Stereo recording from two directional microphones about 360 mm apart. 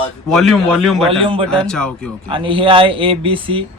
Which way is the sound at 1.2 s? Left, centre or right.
Centre.